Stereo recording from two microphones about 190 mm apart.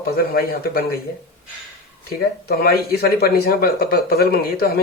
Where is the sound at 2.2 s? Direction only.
55° left (ahead or behind).